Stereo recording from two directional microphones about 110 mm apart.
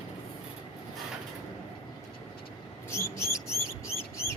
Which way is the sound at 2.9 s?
25° left (ahead or behind).